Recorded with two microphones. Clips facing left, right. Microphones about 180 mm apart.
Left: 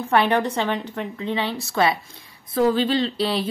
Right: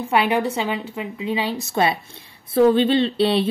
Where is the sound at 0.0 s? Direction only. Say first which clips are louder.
Even; 10° right (ahead or behind).